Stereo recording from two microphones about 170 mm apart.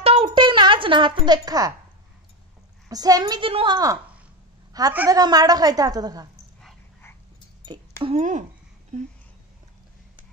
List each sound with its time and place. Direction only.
0.0 s music: 30° right (ahead or behind)
2.9 s a woman's voice: 20° right (ahead or behind)
7.6 s a sound: 30° right (ahead or behind)
8.2 s speech: 45° right (ahead or behind)